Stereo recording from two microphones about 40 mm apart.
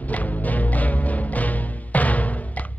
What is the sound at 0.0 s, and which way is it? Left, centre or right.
Music, left.